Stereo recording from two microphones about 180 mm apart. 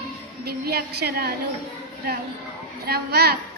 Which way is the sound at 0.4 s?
60° right (ahead or behind).